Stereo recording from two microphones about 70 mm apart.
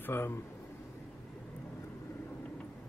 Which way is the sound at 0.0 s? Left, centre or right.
Left.